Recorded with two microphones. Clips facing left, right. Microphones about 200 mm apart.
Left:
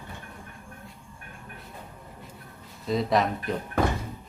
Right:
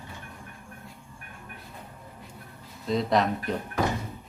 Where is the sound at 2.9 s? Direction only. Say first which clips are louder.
Even; centre (ahead or behind).